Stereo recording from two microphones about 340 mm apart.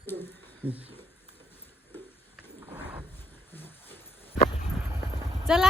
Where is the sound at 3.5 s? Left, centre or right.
Centre.